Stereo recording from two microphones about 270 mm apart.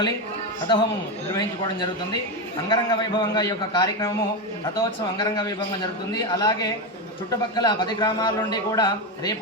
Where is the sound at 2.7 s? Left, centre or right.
Centre.